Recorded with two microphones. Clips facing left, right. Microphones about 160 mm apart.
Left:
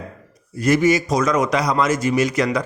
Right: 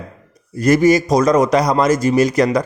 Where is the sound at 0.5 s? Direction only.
40° right (ahead or behind).